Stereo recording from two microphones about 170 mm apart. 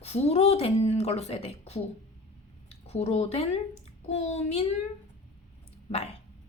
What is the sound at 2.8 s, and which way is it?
A woman's voice, 40° left (ahead or behind).